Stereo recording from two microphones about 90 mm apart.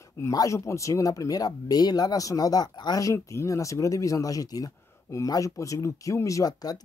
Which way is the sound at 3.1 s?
35° left (ahead or behind).